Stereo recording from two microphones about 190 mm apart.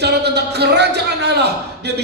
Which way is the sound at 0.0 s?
60° right (ahead or behind).